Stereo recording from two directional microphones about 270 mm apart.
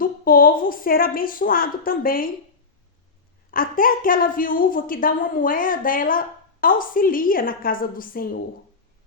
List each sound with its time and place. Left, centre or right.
0.0 s a woman's voice: left
3.5 s a woman's voice: left